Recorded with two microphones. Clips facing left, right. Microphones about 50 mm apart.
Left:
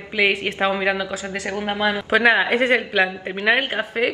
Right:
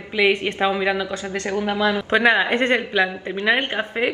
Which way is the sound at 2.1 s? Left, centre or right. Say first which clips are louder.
Left 2 dB; centre.